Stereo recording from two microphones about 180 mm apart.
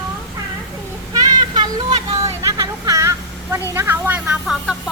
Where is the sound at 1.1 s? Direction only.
20° right (ahead or behind); by 4.7 s 5° right (ahead or behind).